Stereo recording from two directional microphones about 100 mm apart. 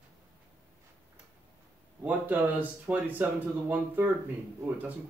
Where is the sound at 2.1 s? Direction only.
15° right (ahead or behind).